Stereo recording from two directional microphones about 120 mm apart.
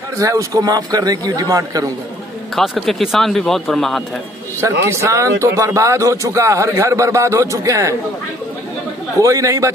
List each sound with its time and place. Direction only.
0.2 s a man's voice: 30° right (ahead or behind)
2.5 s speech: centre (ahead or behind)
4.6 s speech: 25° right (ahead or behind)
9.2 s speech: 30° right (ahead or behind)